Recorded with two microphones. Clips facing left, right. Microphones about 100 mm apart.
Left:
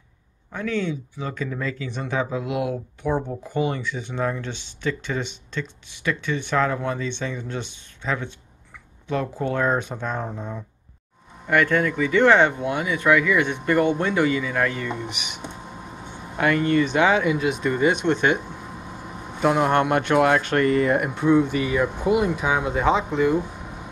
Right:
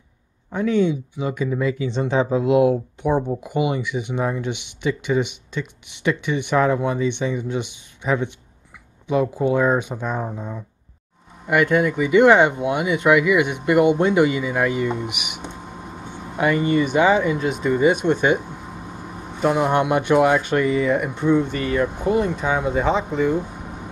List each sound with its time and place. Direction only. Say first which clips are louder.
0.5 s speech: right 7 dB; 20° right (ahead or behind)
19.4 s speech: right 1 dB; 5° right (ahead or behind)